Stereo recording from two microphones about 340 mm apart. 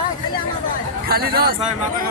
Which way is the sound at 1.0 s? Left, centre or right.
Right.